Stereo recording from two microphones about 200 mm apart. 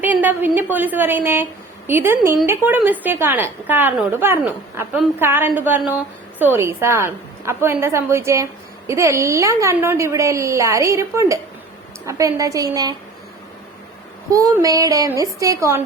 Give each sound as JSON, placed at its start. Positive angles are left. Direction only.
{"t": 0.0, "sound": "a woman's voice", "side_deg": -10}
{"t": 14.3, "sound": "a woman's voice", "side_deg": -15}